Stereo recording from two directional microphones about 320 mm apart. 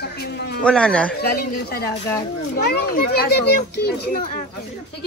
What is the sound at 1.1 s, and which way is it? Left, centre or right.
Speech, left.